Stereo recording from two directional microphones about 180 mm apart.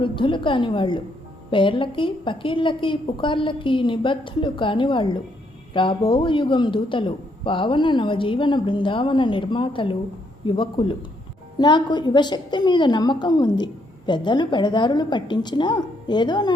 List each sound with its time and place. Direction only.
0.0 s a man's voice: 30° left (ahead or behind)